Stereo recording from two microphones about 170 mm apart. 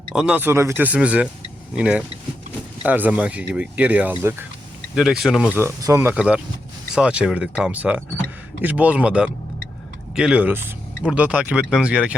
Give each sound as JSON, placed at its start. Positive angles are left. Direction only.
{"t": 0.1, "sound": "speech", "side_deg": -5}
{"t": 4.9, "sound": "speech", "side_deg": 0}